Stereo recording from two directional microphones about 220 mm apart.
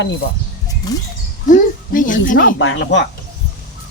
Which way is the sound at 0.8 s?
15° left (ahead or behind).